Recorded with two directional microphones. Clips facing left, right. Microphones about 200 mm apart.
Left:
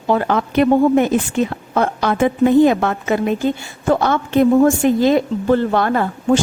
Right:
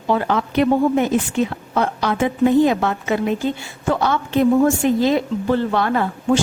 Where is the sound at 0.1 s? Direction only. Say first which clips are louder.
Left 2 dB; 50° left (ahead or behind).